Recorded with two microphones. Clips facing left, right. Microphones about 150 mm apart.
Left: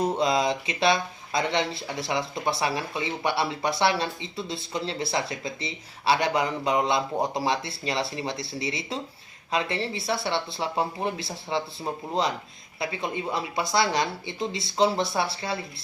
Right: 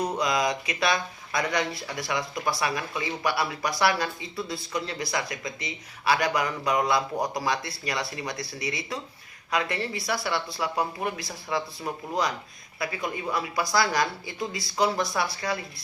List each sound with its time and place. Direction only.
0.0 s speech: 25° left (ahead or behind)